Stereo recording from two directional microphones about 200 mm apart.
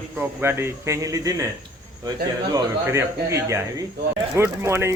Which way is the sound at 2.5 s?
15° right (ahead or behind).